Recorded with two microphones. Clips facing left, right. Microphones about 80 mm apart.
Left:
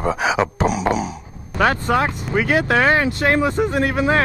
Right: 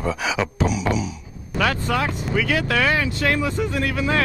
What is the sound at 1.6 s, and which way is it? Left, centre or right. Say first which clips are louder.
Speech: left 4 dB; left.